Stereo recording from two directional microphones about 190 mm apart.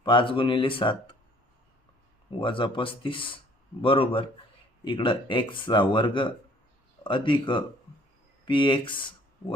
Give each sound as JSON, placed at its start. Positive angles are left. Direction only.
{"t": 0.0, "sound": "speech", "side_deg": 25}
{"t": 2.4, "sound": "speech", "side_deg": 25}